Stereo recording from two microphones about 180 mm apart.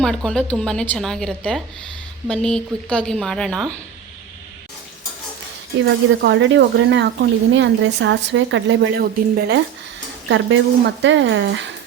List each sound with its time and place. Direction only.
0.0 s a woman's voice: 5° left (ahead or behind)
5.8 s speech: 80° right
10.2 s speech: 85° right